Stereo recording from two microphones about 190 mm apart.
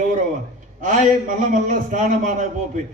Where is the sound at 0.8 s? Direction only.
40° right (ahead or behind).